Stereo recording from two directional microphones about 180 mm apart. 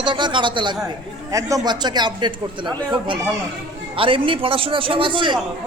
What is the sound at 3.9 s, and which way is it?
A man's voice, 30° right (ahead or behind).